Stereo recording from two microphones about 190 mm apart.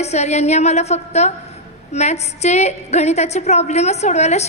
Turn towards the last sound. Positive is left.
turn(degrees=35)  # may be behind; listen again after turning